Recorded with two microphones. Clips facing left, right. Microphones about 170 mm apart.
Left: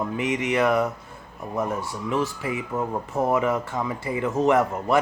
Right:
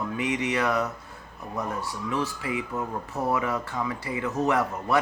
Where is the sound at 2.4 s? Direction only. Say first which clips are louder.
Left 3 dB; 25° left (ahead or behind).